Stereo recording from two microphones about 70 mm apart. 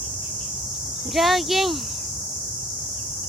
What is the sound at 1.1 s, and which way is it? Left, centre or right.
Speech, centre.